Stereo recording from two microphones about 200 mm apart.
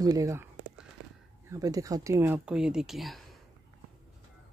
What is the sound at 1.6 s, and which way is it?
Speech, 15° right (ahead or behind).